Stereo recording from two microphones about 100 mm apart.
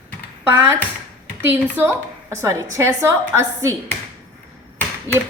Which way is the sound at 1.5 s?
25° right (ahead or behind).